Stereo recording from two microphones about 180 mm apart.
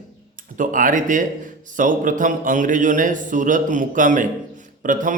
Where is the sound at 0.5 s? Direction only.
50° right (ahead or behind).